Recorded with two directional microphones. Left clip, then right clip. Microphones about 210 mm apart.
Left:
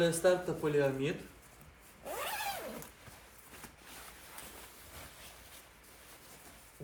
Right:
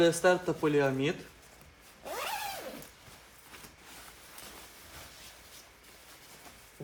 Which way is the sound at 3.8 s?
Centre (ahead or behind).